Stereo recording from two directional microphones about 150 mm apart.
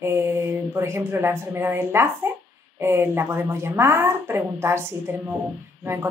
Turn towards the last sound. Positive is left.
turn(degrees=-15)  # may be behind; listen again after turning